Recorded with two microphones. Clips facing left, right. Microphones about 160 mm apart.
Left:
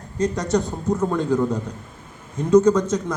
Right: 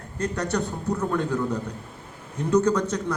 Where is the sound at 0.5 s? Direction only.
10° left (ahead or behind).